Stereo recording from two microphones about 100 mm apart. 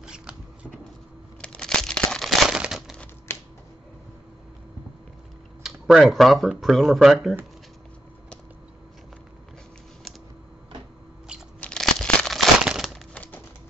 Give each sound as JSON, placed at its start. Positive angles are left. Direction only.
{"t": 0.0, "sound": "scissors", "side_deg": -10}
{"t": 1.4, "sound": "crumpling", "side_deg": 10}
{"t": 3.3, "sound": "typewriter", "side_deg": 25}
{"t": 5.6, "sound": "speech", "side_deg": -5}
{"t": 11.6, "sound": "crumpling", "side_deg": 5}
{"t": 13.1, "sound": "music", "side_deg": 15}